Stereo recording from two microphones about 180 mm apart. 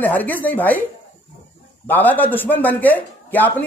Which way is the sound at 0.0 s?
10° left (ahead or behind).